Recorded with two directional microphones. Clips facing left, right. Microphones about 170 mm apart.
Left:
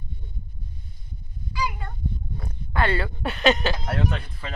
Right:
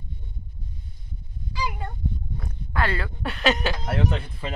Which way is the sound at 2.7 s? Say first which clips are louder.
Left 2 dB; centre (ahead or behind).